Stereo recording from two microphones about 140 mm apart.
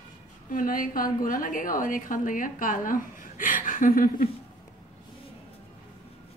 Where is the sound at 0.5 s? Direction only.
80° left.